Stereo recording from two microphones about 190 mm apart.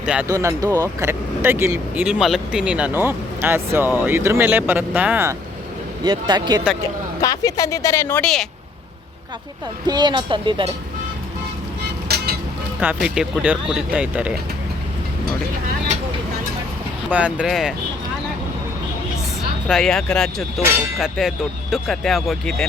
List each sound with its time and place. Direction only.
0.0 s speech: 5° right (ahead or behind)
0.3 s speech: 15° right (ahead or behind)
6.1 s speech: 25° right (ahead or behind)
7.2 s a woman's voice: 20° left (ahead or behind)
8.2 s speech: centre (ahead or behind)
9.8 s speech: 20° right (ahead or behind)
12.0 s music: 55° right (ahead or behind)
12.8 s speech: 5° right (ahead or behind)
17.1 s speech: 5° right (ahead or behind)
19.6 s speech: centre (ahead or behind)